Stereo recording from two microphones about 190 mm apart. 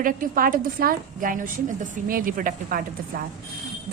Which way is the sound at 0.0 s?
45° right (ahead or behind).